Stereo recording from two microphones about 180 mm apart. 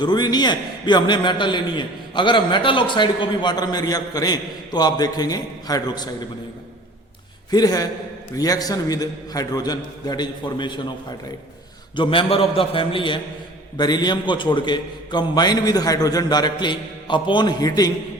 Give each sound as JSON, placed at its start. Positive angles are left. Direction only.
{"t": 0.0, "sound": "a man's voice", "side_deg": 25}
{"t": 7.5, "sound": "a man's voice", "side_deg": 20}
{"t": 11.9, "sound": "a man's voice", "side_deg": 30}